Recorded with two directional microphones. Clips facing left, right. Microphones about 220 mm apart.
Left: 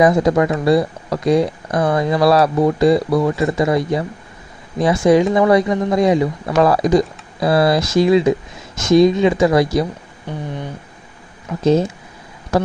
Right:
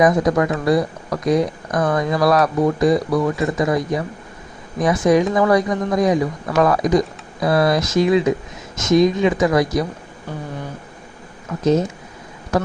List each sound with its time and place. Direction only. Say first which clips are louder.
0.0 s speech: left 2 dB; 30° left (ahead or behind)
11.6 s speech: left 2 dB; 30° left (ahead or behind)